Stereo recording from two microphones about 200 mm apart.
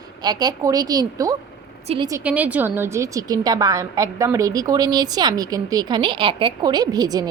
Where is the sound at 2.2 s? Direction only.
5° right (ahead or behind).